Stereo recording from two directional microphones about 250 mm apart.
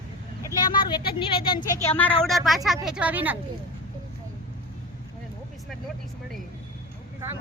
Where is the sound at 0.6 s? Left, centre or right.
Centre.